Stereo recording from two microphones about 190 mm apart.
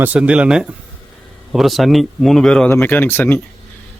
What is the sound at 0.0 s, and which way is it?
Speech, 5° right (ahead or behind).